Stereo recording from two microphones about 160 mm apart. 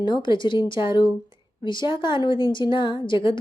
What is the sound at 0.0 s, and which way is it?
A woman's voice, 30° left (ahead or behind).